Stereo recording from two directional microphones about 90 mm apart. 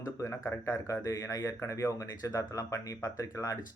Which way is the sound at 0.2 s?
35° left (ahead or behind).